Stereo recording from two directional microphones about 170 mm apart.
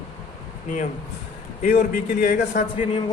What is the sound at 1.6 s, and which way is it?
A man's voice, 55° left (ahead or behind).